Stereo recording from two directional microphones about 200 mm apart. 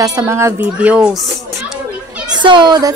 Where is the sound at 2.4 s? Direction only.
25° right (ahead or behind).